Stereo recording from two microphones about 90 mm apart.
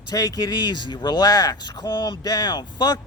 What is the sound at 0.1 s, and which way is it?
Speech, 45° left (ahead or behind).